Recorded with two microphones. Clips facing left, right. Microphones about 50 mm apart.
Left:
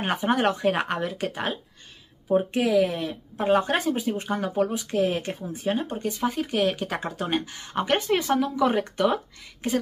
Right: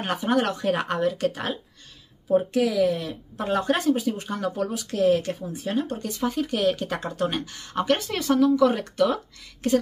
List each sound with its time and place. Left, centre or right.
0.0 s speech: left
2.2 s speech: left